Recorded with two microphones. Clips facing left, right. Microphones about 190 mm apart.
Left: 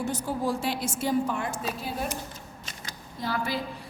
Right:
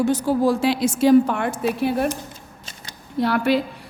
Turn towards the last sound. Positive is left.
turn(degrees=-70)  # may be behind; listen again after turning